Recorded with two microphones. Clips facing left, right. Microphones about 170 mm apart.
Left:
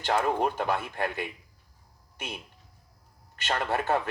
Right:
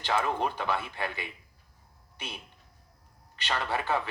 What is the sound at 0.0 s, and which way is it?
A man's voice, 45° left (ahead or behind).